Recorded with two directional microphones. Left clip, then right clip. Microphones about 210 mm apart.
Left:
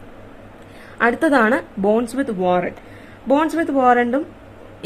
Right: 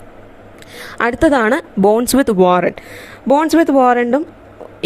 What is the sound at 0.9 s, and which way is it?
Speech, 40° right (ahead or behind).